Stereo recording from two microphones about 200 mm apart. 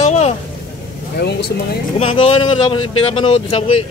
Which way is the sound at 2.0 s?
30° left (ahead or behind).